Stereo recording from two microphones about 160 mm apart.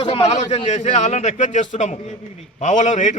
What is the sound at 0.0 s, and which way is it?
A man's voice, 35° left (ahead or behind).